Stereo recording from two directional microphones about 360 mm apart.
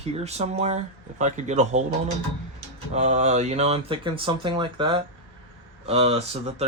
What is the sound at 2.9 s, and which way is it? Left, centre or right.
Speech, centre.